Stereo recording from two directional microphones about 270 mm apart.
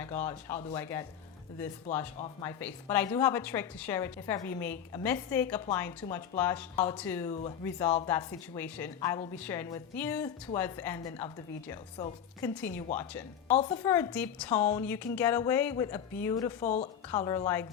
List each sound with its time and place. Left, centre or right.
0.0 s a woman's voice: centre
16.6 s a woman's voice: left
17.1 s a woman's voice: centre